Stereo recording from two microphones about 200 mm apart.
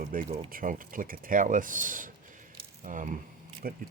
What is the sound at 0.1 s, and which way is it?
Speech, 45° right (ahead or behind).